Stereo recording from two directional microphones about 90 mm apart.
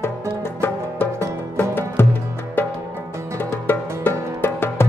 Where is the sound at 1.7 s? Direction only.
25° left (ahead or behind).